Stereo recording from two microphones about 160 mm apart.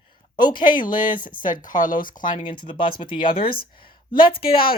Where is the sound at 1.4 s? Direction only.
55° left (ahead or behind).